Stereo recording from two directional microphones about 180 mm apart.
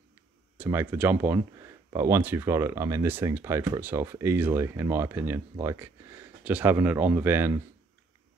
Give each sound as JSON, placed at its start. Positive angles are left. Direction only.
{"t": 0.6, "sound": "speech", "side_deg": -10}